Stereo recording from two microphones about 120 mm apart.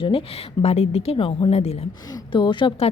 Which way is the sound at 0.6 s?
60° left (ahead or behind).